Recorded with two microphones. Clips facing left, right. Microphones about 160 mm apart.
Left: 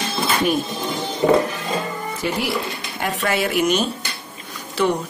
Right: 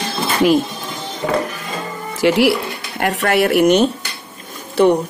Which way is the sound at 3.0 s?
65° right (ahead or behind).